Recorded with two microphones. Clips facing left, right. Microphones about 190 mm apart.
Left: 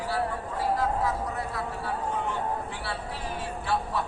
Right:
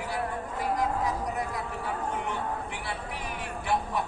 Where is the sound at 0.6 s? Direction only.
15° right (ahead or behind).